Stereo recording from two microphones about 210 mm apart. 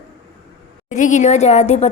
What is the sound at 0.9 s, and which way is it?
A woman's voice, 35° left (ahead or behind).